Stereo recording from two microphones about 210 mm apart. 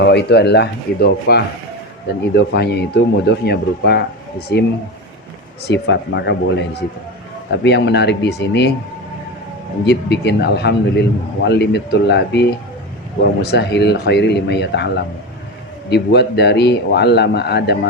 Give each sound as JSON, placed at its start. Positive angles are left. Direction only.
{"t": 0.0, "sound": "speech", "side_deg": 50}
{"t": 2.5, "sound": "speech", "side_deg": 50}
{"t": 5.6, "sound": "speech", "side_deg": 55}
{"t": 9.8, "sound": "speech", "side_deg": 50}